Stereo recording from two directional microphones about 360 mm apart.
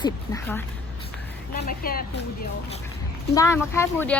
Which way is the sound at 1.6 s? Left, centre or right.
Left.